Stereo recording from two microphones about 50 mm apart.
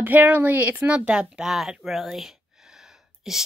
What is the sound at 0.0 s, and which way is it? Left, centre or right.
Speech, right.